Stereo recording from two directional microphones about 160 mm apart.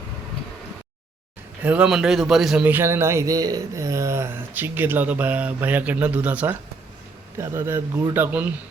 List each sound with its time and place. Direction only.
1.6 s a man's voice: 5° right (ahead or behind)